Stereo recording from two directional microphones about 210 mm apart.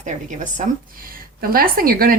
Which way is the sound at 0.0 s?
35° right (ahead or behind).